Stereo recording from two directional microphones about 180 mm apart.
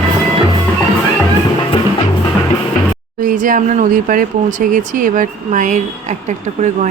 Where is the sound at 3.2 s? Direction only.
50° right (ahead or behind).